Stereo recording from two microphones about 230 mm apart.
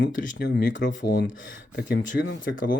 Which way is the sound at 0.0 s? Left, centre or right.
Left.